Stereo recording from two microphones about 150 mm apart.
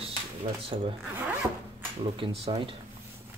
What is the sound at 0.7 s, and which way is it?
Speech, 50° right (ahead or behind).